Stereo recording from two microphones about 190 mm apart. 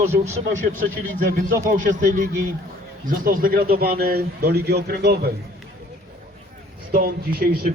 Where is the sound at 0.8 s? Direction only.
45° right (ahead or behind).